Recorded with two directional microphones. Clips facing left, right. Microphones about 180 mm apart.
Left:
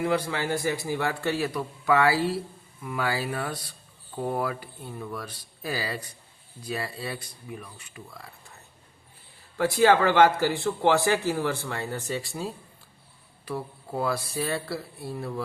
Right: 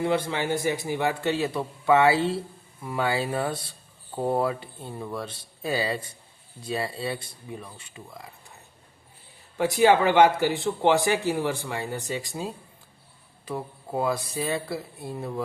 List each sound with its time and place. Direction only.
0.0 s a man's voice: 25° right (ahead or behind)
9.6 s a man's voice: 20° right (ahead or behind)